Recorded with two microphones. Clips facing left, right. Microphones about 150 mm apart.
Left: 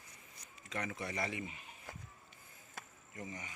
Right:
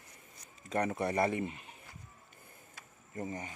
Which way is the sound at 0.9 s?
55° right (ahead or behind).